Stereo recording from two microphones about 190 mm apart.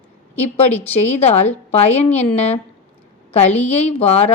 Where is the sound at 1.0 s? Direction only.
35° left (ahead or behind).